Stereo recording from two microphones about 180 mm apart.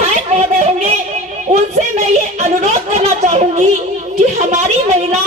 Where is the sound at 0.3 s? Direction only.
35° right (ahead or behind).